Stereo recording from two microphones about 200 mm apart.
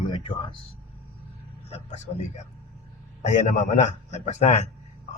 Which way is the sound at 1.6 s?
35° left (ahead or behind).